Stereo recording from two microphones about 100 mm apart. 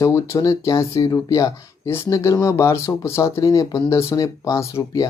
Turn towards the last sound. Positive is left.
turn(degrees=30)  # may be behind; listen again after turning